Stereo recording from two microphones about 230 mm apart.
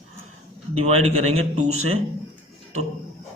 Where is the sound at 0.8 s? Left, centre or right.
Right.